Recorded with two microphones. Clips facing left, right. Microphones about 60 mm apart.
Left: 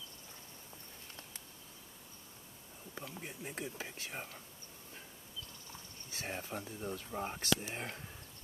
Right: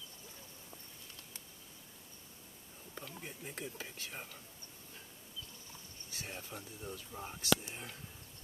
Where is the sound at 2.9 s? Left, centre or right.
Centre.